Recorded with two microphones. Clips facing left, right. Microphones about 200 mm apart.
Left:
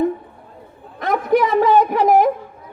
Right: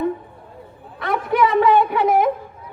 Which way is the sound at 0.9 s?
40° left (ahead or behind).